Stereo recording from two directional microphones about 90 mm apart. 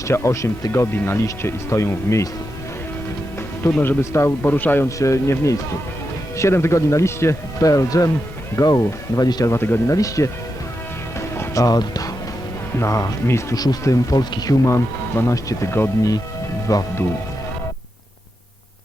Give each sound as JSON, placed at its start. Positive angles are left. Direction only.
{"t": 0.1, "sound": "speech", "side_deg": 30}
{"t": 3.8, "sound": "a man's voice", "side_deg": 25}
{"t": 4.9, "sound": "speech", "side_deg": 35}
{"t": 9.5, "sound": "a man's voice", "side_deg": 25}
{"t": 9.9, "sound": "speech", "side_deg": 35}
{"t": 11.2, "sound": "music", "side_deg": 35}
{"t": 12.8, "sound": "speech", "side_deg": 40}
{"t": 13.6, "sound": "speech", "side_deg": 40}
{"t": 15.1, "sound": "speech", "side_deg": 35}